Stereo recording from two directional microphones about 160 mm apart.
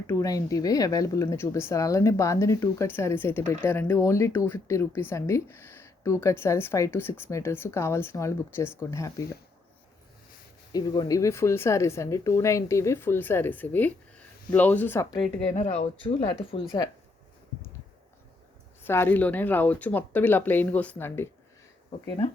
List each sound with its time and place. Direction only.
0.1 s speech: 20° left (ahead or behind)
10.7 s speech: 25° left (ahead or behind)
15.5 s speech: 40° left (ahead or behind)
18.8 s speech: 15° left (ahead or behind)